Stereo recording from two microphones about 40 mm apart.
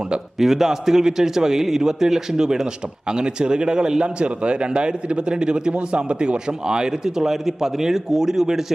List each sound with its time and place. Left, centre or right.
0.3 s a man's voice: centre